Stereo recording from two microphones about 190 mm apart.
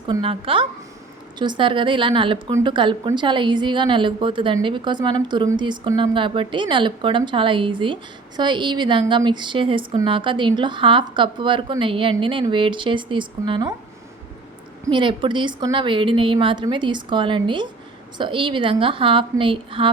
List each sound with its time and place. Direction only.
0.1 s a woman's voice: 30° right (ahead or behind)
14.8 s a woman's voice: 25° right (ahead or behind)